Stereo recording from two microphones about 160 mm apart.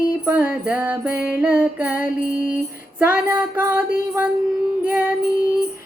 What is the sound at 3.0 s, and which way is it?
Music, 10° right (ahead or behind).